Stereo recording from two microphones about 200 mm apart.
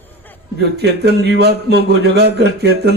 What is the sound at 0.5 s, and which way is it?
Speech, 55° right (ahead or behind).